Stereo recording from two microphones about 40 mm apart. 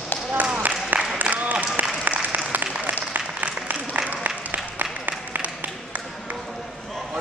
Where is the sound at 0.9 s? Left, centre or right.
Right.